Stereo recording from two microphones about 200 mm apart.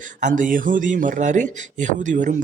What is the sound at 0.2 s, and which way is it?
Speech, 40° right (ahead or behind).